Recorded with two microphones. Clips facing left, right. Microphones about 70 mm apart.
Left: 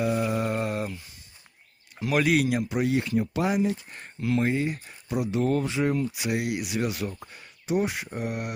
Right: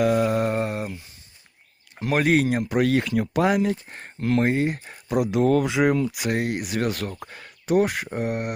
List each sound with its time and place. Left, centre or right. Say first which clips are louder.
0.0 s a sound: right 5 dB; right
2.0 s speech: right 3 dB; right
4.7 s speech: right 5 dB; right
6.3 s speech: right 1 dB; right